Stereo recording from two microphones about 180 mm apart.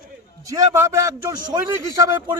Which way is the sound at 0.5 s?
15° right (ahead or behind).